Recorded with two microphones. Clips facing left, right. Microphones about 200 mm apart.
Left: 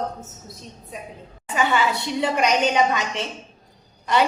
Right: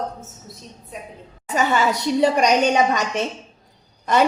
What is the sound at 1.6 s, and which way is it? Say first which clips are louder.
A woman's voice: right 2 dB; 40° right (ahead or behind).